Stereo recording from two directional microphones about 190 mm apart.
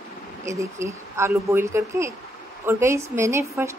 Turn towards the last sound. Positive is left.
turn(degrees=-15)  # may be behind; listen again after turning